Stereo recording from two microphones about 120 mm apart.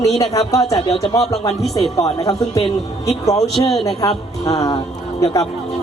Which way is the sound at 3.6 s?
30° left (ahead or behind).